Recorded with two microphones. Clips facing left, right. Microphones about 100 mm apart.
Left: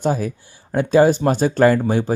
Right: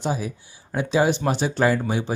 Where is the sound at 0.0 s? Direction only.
50° left (ahead or behind).